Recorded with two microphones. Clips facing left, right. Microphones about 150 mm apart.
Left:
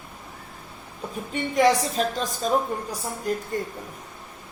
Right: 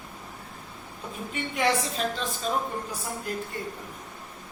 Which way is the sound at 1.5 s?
40° left (ahead or behind).